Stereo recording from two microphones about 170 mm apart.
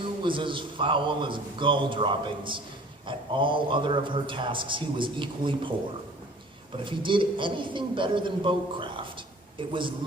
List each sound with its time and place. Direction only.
0.2 s a man's voice: 30° right (ahead or behind)
6.7 s a man's voice: 30° right (ahead or behind)